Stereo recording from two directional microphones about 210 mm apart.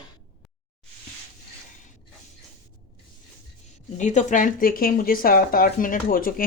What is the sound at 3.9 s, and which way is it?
Speech, 35° left (ahead or behind).